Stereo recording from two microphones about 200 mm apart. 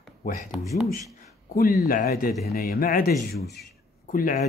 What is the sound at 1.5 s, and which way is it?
Speech, 50° left (ahead or behind).